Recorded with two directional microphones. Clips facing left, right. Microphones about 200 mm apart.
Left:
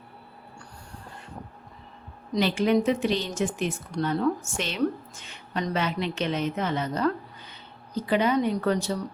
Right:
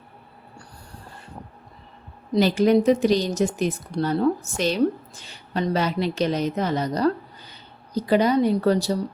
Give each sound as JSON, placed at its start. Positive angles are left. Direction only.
{"t": 2.3, "sound": "speech", "side_deg": -40}